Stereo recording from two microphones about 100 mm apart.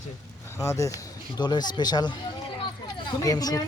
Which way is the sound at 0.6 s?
30° left (ahead or behind).